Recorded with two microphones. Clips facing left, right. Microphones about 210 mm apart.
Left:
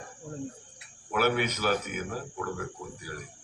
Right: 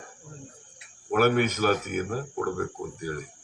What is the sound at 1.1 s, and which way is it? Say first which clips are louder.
A man's voice: right 5 dB; 45° right (ahead or behind).